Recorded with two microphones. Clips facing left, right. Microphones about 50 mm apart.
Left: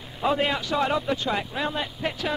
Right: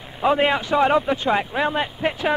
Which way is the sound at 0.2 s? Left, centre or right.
Right.